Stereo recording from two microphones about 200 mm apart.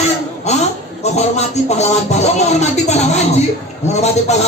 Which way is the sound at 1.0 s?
35° left (ahead or behind).